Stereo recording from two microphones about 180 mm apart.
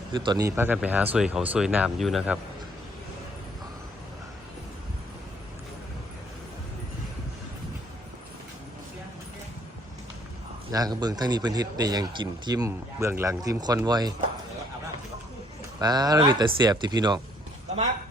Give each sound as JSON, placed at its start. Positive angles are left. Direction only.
{"t": 0.1, "sound": "speech", "side_deg": -25}
{"t": 10.7, "sound": "speech", "side_deg": -20}
{"t": 15.8, "sound": "speech", "side_deg": -20}